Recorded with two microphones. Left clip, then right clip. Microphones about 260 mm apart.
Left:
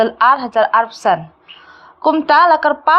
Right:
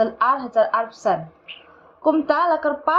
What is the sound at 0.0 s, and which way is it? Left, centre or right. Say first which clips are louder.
A woman's voice: left 7 dB; left.